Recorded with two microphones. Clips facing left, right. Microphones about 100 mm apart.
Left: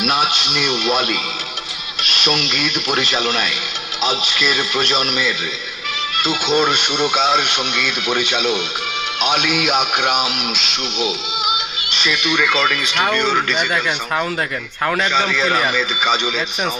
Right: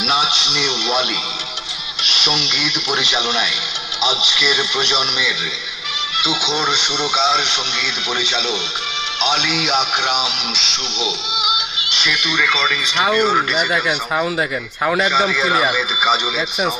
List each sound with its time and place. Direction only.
0.0 s speech: centre (ahead or behind)
4.1 s a man's voice: 45° left (ahead or behind)
4.4 s speech: centre (ahead or behind)
6.5 s a man's voice: 5° left (ahead or behind)